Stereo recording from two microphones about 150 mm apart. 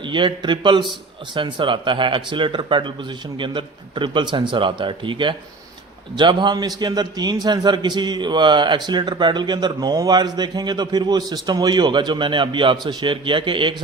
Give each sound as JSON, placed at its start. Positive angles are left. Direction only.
{"t": 0.0, "sound": "a man's voice", "side_deg": -30}